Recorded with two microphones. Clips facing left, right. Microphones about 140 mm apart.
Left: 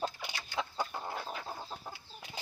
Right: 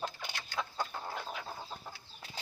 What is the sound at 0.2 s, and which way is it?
Chicken, 10° left (ahead or behind).